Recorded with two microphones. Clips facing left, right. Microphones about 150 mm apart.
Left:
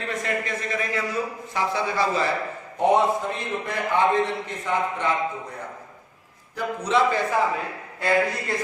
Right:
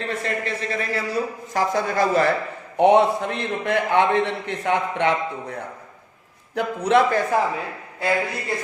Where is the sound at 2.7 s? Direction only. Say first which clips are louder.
Right 4 dB; 70° right (ahead or behind).